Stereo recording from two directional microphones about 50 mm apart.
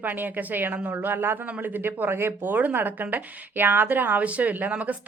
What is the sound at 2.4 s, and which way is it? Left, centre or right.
A woman's voice, right.